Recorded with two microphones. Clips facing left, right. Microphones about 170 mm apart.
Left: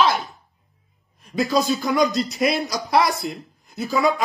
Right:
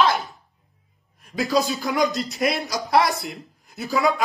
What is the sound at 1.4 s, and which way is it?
Speech, 20° left (ahead or behind).